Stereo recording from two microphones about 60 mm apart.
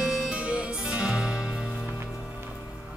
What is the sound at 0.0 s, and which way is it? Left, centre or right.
Music, centre.